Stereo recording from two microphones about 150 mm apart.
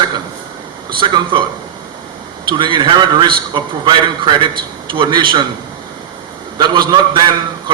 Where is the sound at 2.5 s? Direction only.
35° right (ahead or behind).